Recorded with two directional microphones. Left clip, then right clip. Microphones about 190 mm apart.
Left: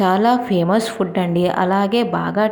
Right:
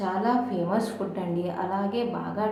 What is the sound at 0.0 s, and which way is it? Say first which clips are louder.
A woman's voice: left 10 dB; 45° left (ahead or behind).